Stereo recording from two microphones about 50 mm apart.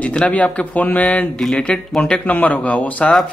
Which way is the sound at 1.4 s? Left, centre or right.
Centre.